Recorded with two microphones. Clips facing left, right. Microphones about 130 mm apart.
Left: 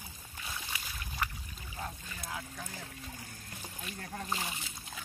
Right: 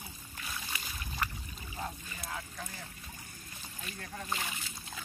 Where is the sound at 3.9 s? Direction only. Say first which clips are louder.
Left 2 dB; 35° left (ahead or behind).